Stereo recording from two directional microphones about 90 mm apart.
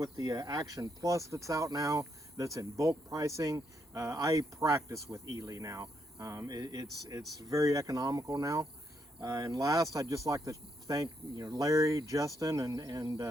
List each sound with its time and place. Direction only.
0.0 s speech: 45° right (ahead or behind)
0.8 s speech: 35° right (ahead or behind)
6.6 s speech: 50° right (ahead or behind)
11.7 s speech: 40° right (ahead or behind)